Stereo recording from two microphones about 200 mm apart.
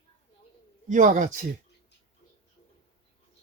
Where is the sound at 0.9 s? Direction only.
40° right (ahead or behind).